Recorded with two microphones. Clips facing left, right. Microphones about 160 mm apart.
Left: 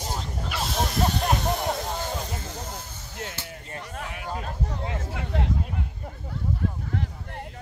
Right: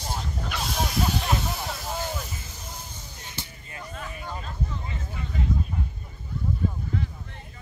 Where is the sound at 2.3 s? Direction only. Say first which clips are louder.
Left 7 dB; 65° left (ahead or behind).